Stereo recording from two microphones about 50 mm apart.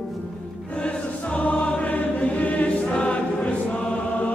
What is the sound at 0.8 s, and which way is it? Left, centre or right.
Choir, left.